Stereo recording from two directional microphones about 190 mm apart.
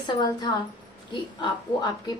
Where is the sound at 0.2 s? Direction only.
20° left (ahead or behind).